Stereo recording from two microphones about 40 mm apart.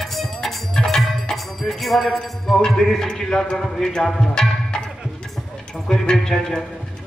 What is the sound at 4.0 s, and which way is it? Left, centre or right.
Music, centre.